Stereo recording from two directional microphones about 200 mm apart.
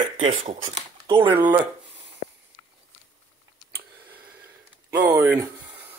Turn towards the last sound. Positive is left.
turn(degrees=-10)  # may be behind; listen again after turning